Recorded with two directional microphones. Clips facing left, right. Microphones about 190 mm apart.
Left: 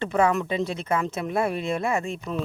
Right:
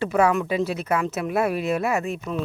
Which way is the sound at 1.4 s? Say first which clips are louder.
Right 2 dB; 25° left (ahead or behind).